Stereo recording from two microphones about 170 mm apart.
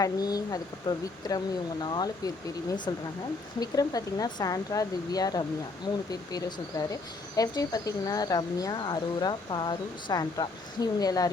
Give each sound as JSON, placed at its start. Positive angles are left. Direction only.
{"t": 0.0, "sound": "speech", "side_deg": 20}